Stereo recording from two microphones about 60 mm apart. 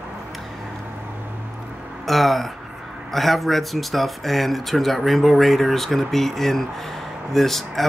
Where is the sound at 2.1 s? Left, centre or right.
Centre.